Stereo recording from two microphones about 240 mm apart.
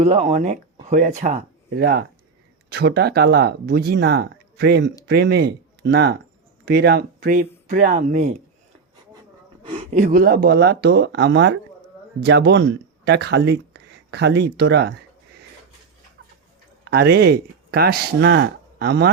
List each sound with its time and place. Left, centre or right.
0.0 s speech: right
9.6 s speech: right
16.8 s speech: right